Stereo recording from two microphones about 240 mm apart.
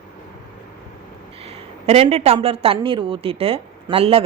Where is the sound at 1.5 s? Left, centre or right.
Right.